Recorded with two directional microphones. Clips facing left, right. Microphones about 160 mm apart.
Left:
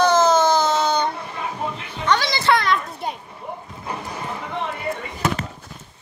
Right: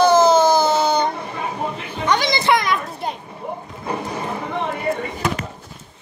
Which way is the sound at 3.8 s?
25° right (ahead or behind).